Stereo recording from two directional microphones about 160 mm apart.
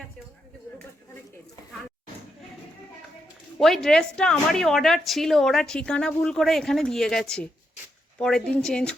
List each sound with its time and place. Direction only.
3.6 s a woman's voice: centre (ahead or behind)